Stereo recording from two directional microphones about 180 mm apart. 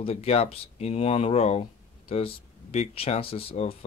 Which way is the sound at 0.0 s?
35° left (ahead or behind).